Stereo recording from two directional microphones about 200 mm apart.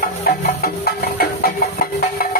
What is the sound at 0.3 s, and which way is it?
Music, 50° left (ahead or behind).